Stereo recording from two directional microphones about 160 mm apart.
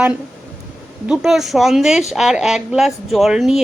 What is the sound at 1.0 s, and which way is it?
Speech, centre (ahead or behind).